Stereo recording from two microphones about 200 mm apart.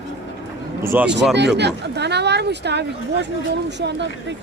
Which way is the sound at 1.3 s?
60° right (ahead or behind).